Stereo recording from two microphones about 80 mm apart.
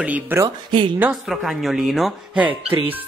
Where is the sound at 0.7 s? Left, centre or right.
Right.